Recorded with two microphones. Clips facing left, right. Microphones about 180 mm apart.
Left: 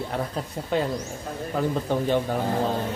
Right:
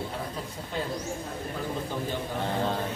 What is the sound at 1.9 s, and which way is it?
Speech, 70° left (ahead or behind).